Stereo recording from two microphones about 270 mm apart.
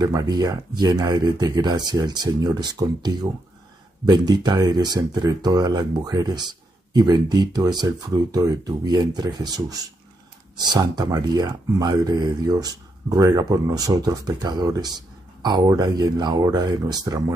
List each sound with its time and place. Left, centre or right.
0.0 s speech: centre